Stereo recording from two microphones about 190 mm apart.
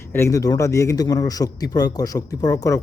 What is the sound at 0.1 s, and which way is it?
A man's voice, 15° left (ahead or behind).